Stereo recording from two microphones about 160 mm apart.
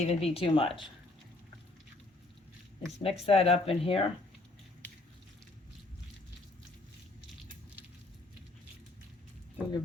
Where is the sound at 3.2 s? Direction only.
40° left (ahead or behind).